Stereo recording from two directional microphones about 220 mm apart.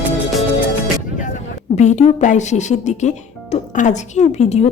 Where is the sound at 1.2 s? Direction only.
35° left (ahead or behind).